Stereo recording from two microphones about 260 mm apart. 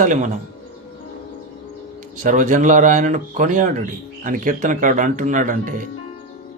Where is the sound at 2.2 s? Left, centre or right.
Right.